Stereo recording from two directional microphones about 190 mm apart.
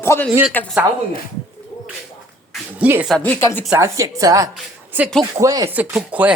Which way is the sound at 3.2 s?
10° left (ahead or behind).